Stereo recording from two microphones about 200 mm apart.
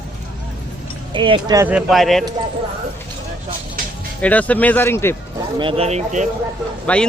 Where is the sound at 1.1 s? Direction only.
25° right (ahead or behind).